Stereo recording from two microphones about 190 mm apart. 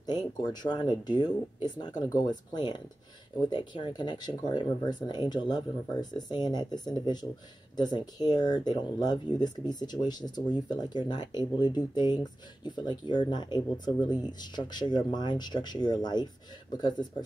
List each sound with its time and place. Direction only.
0.4 s speech: 20° left (ahead or behind)